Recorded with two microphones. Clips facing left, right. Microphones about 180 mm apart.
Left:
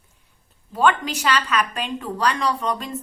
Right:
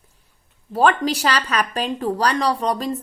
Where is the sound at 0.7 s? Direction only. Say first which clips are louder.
Right 2 dB; 35° right (ahead or behind).